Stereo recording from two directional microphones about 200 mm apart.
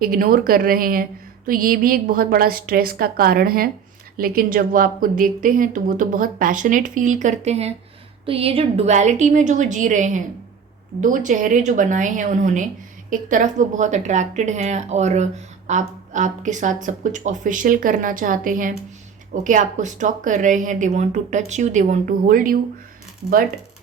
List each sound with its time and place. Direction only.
0.0 s a woman's voice: 45° right (ahead or behind)